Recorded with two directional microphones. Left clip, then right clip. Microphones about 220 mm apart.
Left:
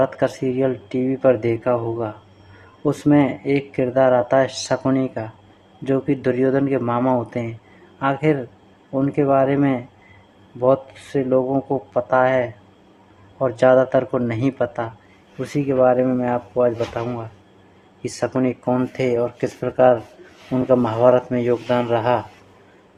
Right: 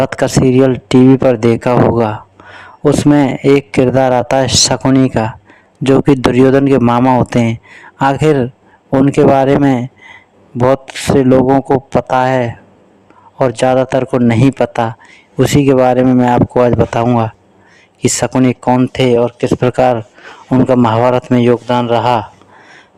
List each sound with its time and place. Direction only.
0.0 s speech: 40° right (ahead or behind)